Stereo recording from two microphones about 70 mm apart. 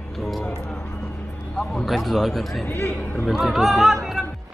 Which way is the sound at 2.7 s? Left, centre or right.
Left.